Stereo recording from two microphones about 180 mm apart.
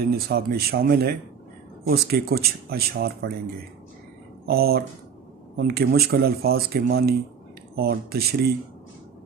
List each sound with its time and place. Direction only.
0.1 s speech: 60° right (ahead or behind)
4.5 s speech: 60° right (ahead or behind)